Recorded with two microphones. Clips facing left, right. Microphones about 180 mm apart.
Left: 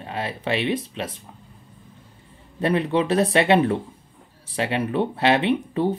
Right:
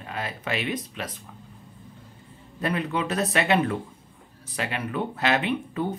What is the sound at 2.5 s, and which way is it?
Speech, 30° left (ahead or behind).